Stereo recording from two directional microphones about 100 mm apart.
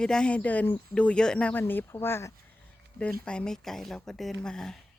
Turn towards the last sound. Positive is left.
turn(degrees=5)  # may be behind; listen again after turning